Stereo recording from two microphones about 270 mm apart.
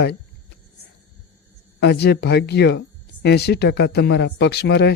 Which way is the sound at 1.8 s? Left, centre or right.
Left.